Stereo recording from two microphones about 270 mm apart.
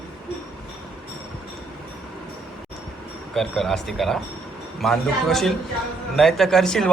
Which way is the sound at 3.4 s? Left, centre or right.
Centre.